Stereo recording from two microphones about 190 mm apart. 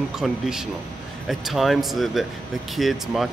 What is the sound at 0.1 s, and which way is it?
Speech, 5° right (ahead or behind).